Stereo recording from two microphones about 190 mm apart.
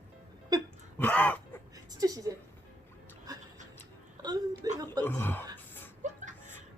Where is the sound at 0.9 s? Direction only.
10° left (ahead or behind).